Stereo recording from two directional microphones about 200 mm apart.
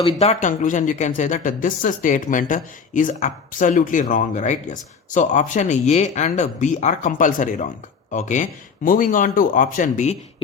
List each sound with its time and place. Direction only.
0.0 s speech: 30° left (ahead or behind)